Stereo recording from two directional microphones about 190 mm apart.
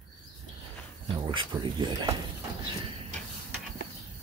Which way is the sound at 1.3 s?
25° right (ahead or behind).